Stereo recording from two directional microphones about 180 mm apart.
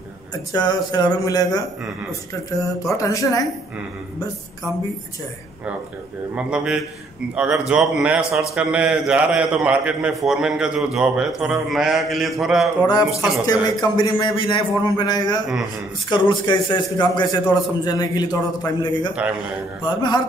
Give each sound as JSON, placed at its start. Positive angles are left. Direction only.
{"t": 0.3, "sound": "a man's voice", "side_deg": 20}
{"t": 2.8, "sound": "a man's voice", "side_deg": 20}
{"t": 6.3, "sound": "a man's voice", "side_deg": -5}
{"t": 13.5, "sound": "a man's voice", "side_deg": 20}
{"t": 15.4, "sound": "a man's voice", "side_deg": 0}
{"t": 16.1, "sound": "a man's voice", "side_deg": 25}